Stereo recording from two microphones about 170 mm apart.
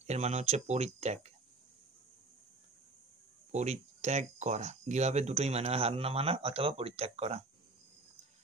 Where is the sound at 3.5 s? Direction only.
40° right (ahead or behind).